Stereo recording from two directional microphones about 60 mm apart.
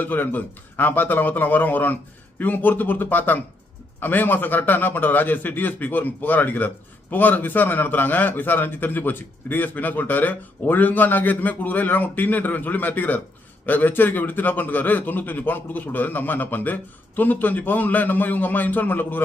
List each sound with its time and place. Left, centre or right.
0.0 s a man's voice: left